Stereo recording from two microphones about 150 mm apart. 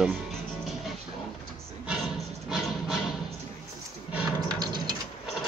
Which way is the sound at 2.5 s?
Centre (ahead or behind).